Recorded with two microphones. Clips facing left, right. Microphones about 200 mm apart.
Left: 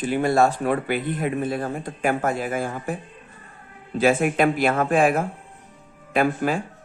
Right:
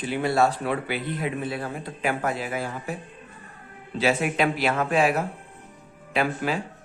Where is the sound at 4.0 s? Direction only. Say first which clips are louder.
Left 4 dB; 50° left (ahead or behind).